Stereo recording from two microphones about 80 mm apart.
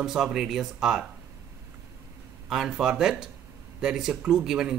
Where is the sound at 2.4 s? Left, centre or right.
Centre.